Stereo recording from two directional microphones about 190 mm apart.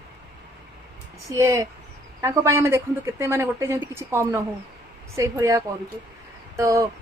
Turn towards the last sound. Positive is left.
turn(degrees=-15)  # may be behind; listen again after turning